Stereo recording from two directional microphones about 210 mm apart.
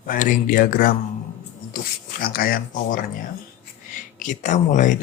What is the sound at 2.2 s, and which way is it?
Speech, 45° left (ahead or behind).